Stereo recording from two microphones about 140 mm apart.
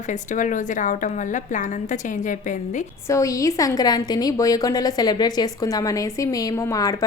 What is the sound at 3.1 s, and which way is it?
A woman's voice, 25° left (ahead or behind).